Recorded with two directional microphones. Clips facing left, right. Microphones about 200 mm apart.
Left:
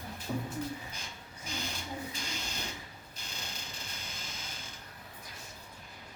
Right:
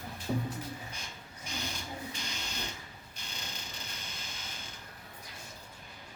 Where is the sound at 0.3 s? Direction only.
15° right (ahead or behind).